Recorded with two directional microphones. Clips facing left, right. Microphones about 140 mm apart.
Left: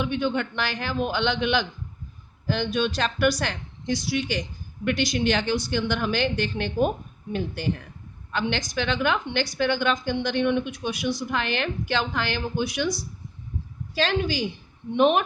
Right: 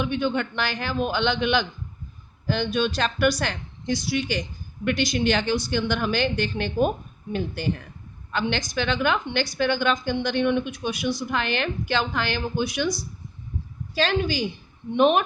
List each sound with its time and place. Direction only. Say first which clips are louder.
0.0 s a woman's voice: right 1 dB; 50° right (ahead or behind)